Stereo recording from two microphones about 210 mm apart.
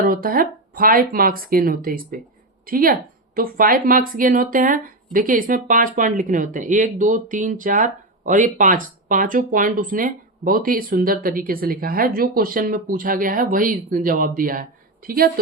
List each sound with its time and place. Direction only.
0.0 s speech: 40° right (ahead or behind)